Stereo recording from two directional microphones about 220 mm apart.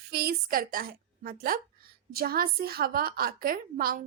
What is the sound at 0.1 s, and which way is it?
A woman's voice, 45° right (ahead or behind).